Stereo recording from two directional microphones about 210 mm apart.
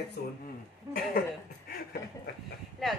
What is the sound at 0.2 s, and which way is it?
Speech, 50° left (ahead or behind).